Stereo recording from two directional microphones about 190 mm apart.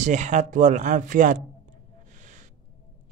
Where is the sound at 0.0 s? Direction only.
40° right (ahead or behind).